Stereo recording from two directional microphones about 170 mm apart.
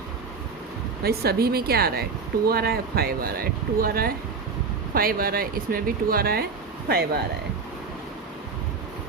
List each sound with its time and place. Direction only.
1.0 s speech: 65° right (ahead or behind)